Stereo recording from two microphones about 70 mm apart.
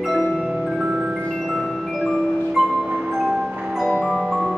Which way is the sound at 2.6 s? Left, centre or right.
Centre.